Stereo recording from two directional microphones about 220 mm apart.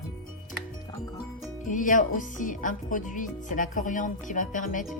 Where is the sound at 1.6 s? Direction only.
35° left (ahead or behind).